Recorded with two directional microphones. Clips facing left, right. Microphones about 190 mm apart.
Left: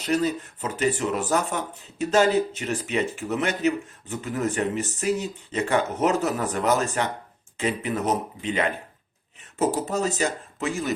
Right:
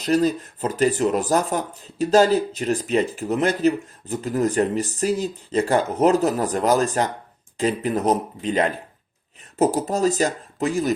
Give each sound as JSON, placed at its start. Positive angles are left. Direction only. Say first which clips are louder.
{"t": 0.0, "sound": "speech", "louder": "right 4 dB", "side_deg": -35}